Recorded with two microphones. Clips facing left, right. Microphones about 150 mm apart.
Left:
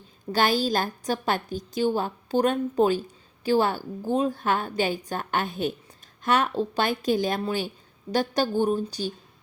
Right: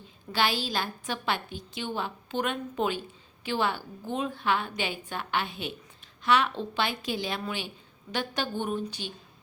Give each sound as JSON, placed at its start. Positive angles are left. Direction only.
{"t": 0.3, "sound": "a woman's voice", "side_deg": 45}